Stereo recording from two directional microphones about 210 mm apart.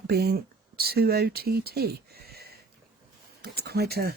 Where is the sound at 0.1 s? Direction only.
50° right (ahead or behind).